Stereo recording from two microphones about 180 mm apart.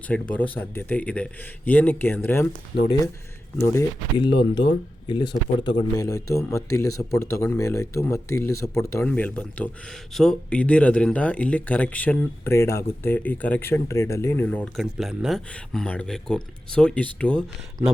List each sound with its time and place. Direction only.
0.1 s speech: 10° left (ahead or behind)
3.7 s speech: 20° left (ahead or behind)
4.3 s speech: 75° left (ahead or behind)
4.7 s speech: 25° left (ahead or behind); by 17.4 s 5° left (ahead or behind)